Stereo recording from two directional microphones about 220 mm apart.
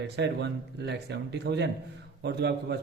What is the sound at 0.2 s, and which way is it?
A man's voice, 50° right (ahead or behind).